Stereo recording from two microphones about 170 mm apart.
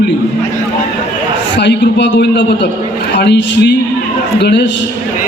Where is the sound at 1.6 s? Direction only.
90° left.